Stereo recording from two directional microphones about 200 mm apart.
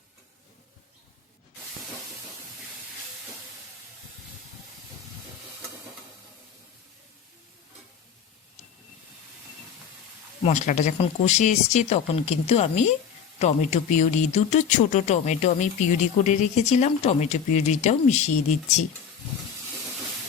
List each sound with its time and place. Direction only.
10.4 s speech: 35° left (ahead or behind)